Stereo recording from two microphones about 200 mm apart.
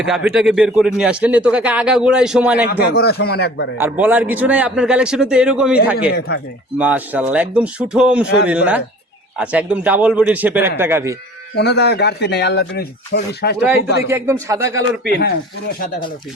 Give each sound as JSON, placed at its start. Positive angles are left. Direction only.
{"t": 0.0, "sound": "speech", "side_deg": -5}
{"t": 2.6, "sound": "speech", "side_deg": 55}
{"t": 3.8, "sound": "a man's voice", "side_deg": -10}
{"t": 6.1, "sound": "speech", "side_deg": 55}
{"t": 6.7, "sound": "a man's voice", "side_deg": -5}
{"t": 11.5, "sound": "speech", "side_deg": 55}
{"t": 14.1, "sound": "a man's voice", "side_deg": -15}
{"t": 15.1, "sound": "speech", "side_deg": 50}